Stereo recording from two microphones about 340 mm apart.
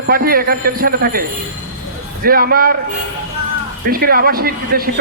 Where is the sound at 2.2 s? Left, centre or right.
Right.